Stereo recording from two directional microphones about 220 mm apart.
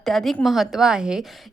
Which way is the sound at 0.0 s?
Centre (ahead or behind).